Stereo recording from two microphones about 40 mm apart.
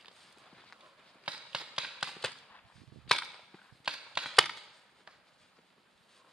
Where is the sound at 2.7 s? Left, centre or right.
Centre.